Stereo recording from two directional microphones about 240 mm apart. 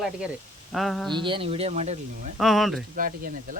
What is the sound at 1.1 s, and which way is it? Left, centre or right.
Speech, right.